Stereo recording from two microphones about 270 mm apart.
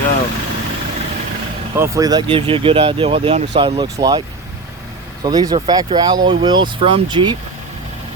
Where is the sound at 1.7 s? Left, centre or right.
Centre.